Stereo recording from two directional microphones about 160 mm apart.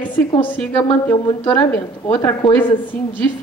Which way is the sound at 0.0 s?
10° left (ahead or behind).